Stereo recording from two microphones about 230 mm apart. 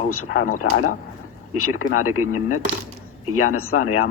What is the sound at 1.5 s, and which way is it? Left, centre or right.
Speech, left.